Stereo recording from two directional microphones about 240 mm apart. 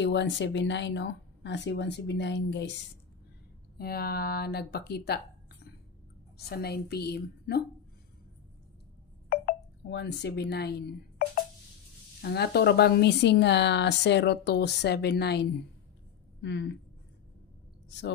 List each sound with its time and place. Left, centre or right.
0.0 s a woman's voice: left
9.3 s a woman's voice: left